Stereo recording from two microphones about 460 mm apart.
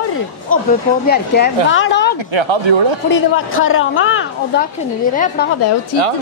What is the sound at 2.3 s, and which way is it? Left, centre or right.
Speech, right.